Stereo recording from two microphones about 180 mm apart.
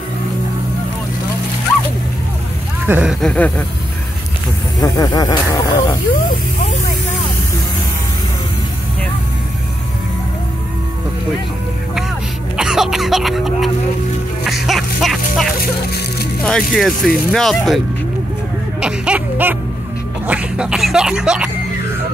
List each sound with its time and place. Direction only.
2.9 s speech: 5° right (ahead or behind)
4.8 s speech: 20° left (ahead or behind)
12.5 s speech: 5° right (ahead or behind)
18.8 s a sound: 5° right (ahead or behind)
20.2 s speech: 5° right (ahead or behind)